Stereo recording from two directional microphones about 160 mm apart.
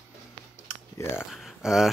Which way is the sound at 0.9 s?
15° left (ahead or behind).